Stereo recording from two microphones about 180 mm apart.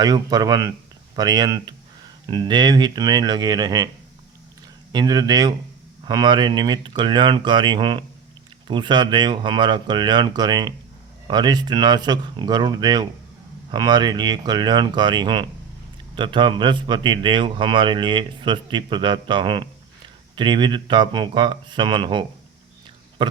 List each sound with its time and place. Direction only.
0.0 s speech: 20° right (ahead or behind)
4.9 s speech: 20° right (ahead or behind)